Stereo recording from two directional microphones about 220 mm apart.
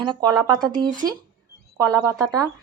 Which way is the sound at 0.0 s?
20° right (ahead or behind).